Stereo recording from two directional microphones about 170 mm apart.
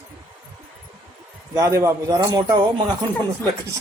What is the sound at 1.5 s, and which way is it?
Speech, 20° right (ahead or behind).